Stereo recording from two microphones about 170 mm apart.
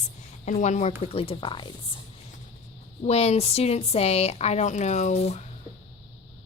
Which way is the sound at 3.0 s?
40° left (ahead or behind).